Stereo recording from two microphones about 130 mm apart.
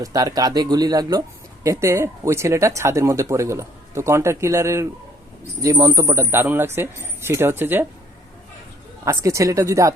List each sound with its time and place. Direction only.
0.0 s speech: 25° right (ahead or behind)
9.0 s speech: 25° right (ahead or behind)